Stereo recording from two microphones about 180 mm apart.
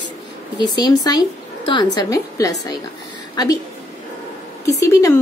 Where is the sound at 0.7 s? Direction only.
20° left (ahead or behind).